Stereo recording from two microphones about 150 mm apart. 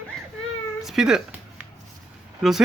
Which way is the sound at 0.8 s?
5° right (ahead or behind).